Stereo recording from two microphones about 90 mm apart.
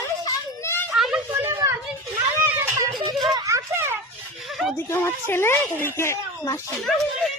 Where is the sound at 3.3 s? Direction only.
35° right (ahead or behind).